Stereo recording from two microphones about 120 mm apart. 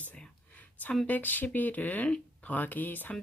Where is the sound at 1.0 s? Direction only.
15° left (ahead or behind).